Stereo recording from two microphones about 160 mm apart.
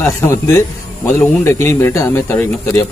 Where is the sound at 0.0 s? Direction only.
20° left (ahead or behind).